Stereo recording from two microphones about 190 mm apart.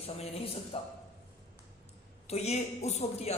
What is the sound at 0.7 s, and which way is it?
Speech, 30° left (ahead or behind).